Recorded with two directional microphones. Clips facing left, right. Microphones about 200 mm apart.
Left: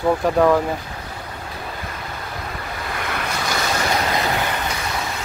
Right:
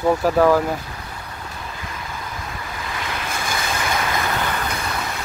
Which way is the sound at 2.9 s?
55° left (ahead or behind).